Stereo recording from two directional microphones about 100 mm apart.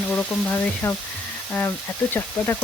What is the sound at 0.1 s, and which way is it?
Speech, 10° left (ahead or behind).